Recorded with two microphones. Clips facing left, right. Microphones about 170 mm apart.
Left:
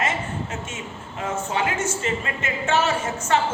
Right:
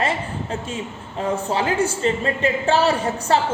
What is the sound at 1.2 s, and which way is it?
A woman's voice, 35° right (ahead or behind).